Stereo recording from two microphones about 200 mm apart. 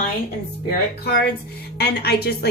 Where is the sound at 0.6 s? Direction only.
50° left (ahead or behind).